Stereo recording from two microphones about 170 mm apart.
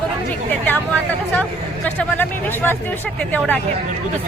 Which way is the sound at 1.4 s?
10° left (ahead or behind).